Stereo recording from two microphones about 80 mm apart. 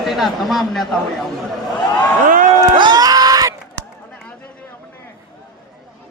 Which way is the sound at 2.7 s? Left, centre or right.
Right.